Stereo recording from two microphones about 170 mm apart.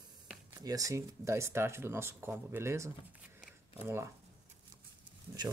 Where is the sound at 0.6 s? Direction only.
20° right (ahead or behind).